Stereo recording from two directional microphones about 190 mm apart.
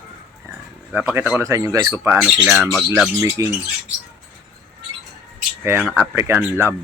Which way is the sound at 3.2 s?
15° right (ahead or behind).